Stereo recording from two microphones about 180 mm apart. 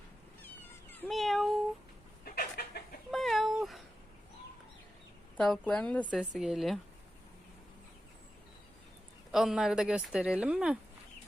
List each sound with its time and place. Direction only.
0.4 s cat: 10° left (ahead or behind)
1.1 s cat: centre (ahead or behind)
2.2 s a sound: 55° left (ahead or behind)
3.1 s cat: centre (ahead or behind)
5.4 s a woman's voice: 5° left (ahead or behind)
6.1 s speech: 5° right (ahead or behind)
9.3 s speech: centre (ahead or behind)